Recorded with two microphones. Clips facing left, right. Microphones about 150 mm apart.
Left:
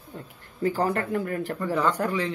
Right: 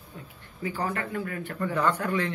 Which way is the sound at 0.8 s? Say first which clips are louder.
Left 3 dB; 40° left (ahead or behind).